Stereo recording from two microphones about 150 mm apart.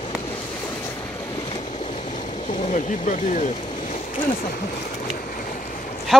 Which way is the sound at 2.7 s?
55° left (ahead or behind).